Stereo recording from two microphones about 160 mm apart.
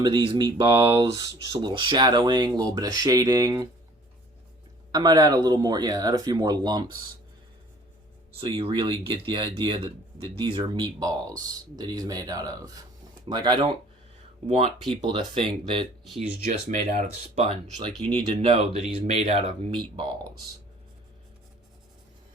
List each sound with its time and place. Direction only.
0.0 s speech: 30° right (ahead or behind)
4.9 s speech: 25° right (ahead or behind)
8.4 s speech: 35° right (ahead or behind)
14.4 s speech: 40° right (ahead or behind)
16.5 s speech: 50° right (ahead or behind)
17.7 s speech: 35° right (ahead or behind)